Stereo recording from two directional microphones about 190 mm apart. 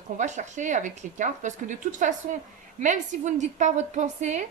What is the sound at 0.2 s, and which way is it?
A woman's voice, 40° right (ahead or behind).